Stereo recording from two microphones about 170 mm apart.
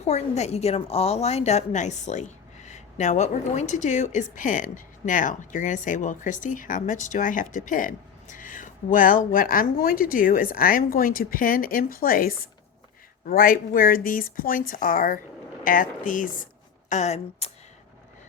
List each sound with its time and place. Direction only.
0.0 s a woman's voice: 40° left (ahead or behind)
16.9 s speech: 40° left (ahead or behind)